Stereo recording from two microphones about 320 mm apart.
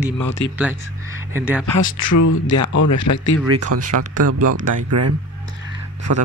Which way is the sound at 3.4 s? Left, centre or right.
Right.